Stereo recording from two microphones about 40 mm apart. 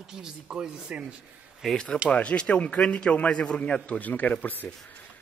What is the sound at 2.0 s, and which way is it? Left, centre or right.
A man's voice, left.